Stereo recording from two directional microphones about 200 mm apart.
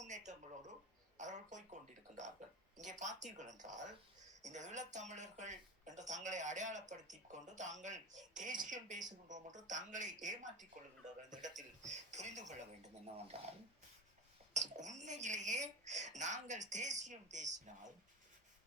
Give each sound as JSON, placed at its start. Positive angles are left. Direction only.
{"t": 0.0, "sound": "a sound", "side_deg": -35}
{"t": 3.0, "sound": "speech", "side_deg": -35}
{"t": 14.5, "sound": "speech", "side_deg": -35}